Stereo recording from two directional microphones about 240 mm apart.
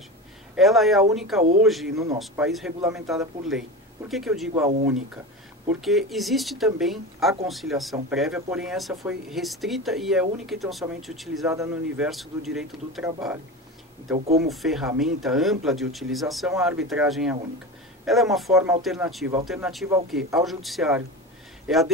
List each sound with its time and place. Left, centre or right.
0.6 s speech: centre
11.4 s speech: centre
12.1 s speech: centre
14.1 s speech: right
14.5 s speech: centre